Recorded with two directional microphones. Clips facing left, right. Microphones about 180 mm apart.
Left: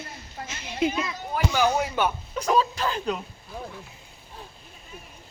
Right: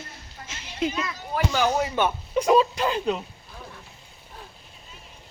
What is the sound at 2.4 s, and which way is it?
Speech, 10° right (ahead or behind).